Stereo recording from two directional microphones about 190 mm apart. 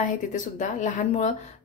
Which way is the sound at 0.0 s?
40° left (ahead or behind).